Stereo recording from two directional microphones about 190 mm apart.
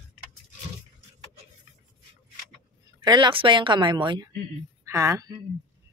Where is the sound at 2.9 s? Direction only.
25° right (ahead or behind).